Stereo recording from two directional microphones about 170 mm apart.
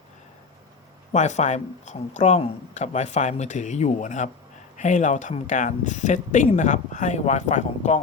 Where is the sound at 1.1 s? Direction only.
45° left (ahead or behind).